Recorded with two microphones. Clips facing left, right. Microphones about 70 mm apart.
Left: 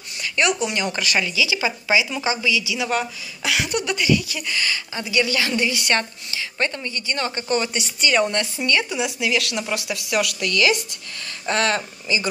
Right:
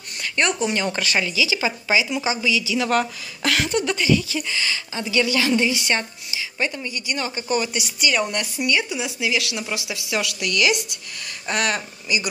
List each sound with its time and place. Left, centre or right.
0.2 s a woman's voice: right
2.8 s a woman's voice: centre
3.6 s a woman's voice: right; by 8.1 s centre
8.1 s speech: centre
8.4 s speech: centre
8.8 s speech: left
9.2 s a woman's voice: centre